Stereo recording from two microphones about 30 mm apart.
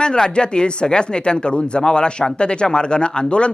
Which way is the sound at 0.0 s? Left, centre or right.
Left.